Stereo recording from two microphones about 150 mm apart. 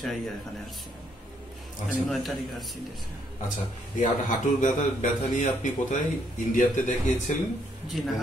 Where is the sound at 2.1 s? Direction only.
Centre (ahead or behind).